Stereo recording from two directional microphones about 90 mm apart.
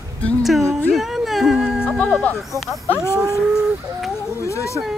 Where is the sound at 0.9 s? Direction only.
Centre (ahead or behind).